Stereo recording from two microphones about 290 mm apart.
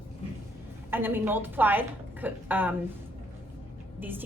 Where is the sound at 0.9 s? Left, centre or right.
Centre.